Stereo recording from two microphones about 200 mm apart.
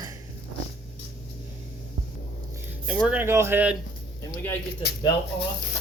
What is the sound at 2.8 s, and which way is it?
Speech, 5° right (ahead or behind).